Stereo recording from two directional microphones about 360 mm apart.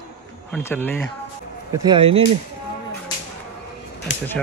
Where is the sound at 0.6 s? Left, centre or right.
Centre.